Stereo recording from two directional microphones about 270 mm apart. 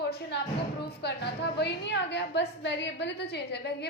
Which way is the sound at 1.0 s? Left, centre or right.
Left.